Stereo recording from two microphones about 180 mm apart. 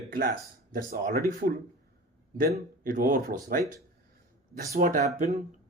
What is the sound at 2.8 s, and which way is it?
Speech, 50° right (ahead or behind).